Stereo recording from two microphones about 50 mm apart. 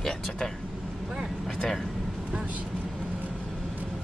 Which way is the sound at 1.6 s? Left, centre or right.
Centre.